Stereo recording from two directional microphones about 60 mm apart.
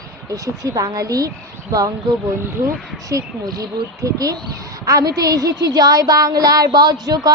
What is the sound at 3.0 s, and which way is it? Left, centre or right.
A woman's voice, right.